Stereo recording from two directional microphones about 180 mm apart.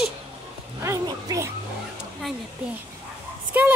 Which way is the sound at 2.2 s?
Centre (ahead or behind).